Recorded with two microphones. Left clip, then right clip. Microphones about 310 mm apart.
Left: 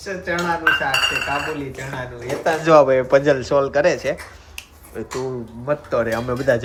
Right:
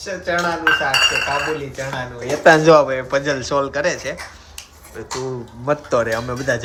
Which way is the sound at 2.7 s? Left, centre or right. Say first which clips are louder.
Even; centre.